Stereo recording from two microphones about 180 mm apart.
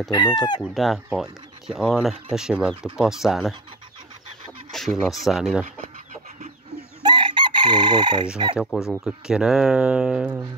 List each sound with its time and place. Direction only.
0.1 s speech: 25° left (ahead or behind)
0.7 s speech: centre (ahead or behind)
4.7 s speech: centre (ahead or behind)
7.0 s chicken: 25° right (ahead or behind)
8.5 s speech: centre (ahead or behind)